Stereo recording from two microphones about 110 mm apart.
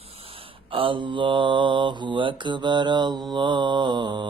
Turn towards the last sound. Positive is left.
turn(degrees=-45)  # may be behind; listen again after turning